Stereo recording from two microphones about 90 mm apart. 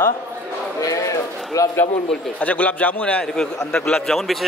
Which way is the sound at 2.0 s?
15° left (ahead or behind).